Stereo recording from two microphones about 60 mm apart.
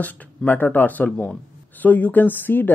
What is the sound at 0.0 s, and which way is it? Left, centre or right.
Speech, left.